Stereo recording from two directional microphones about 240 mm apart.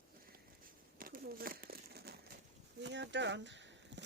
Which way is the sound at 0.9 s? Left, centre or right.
Right.